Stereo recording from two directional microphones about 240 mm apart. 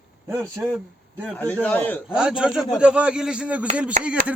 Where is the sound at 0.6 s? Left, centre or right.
Centre.